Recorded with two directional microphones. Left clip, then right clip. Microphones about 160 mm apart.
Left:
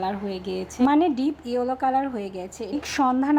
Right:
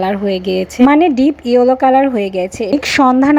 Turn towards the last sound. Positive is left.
turn(degrees=-35)  # may be behind; listen again after turning